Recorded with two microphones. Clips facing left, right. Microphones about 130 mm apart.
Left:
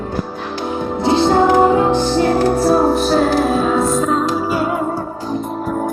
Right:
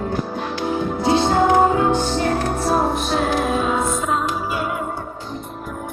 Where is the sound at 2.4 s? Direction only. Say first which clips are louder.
Left 6 dB; 35° left (ahead or behind).